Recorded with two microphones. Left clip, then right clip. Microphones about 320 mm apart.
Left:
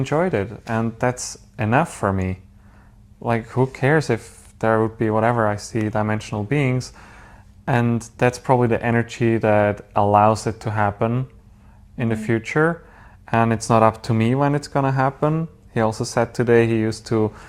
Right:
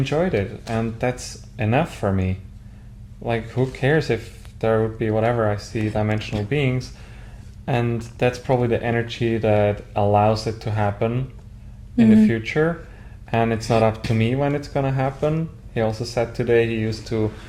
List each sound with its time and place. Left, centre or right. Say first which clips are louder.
0.0 s speech: left 1 dB; left